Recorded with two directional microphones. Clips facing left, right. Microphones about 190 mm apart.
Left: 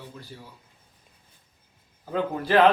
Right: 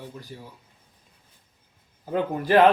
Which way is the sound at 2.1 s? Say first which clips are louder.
Right 2 dB; 15° right (ahead or behind).